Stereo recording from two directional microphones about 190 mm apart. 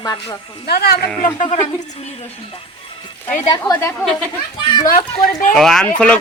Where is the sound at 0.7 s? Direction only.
55° left (ahead or behind).